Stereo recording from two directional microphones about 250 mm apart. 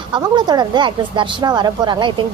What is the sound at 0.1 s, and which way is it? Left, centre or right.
Speech, centre.